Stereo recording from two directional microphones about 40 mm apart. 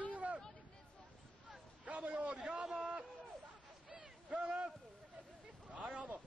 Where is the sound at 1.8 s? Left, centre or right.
Right.